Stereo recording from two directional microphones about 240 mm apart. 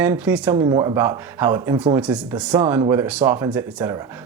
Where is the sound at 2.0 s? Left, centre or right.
Centre.